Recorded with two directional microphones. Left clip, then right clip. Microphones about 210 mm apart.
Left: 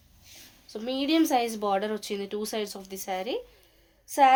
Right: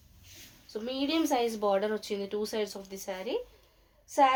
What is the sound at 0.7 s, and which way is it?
A woman's voice, 50° left (ahead or behind).